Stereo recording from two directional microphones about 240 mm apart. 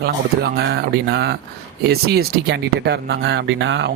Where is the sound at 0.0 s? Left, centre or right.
Right.